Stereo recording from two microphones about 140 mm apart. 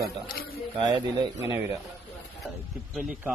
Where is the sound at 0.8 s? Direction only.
25° right (ahead or behind).